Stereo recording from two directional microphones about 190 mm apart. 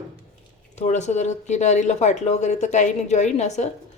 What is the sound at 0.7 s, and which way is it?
Speech, 35° left (ahead or behind).